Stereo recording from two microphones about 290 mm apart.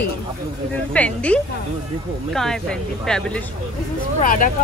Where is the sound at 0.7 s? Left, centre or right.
Centre.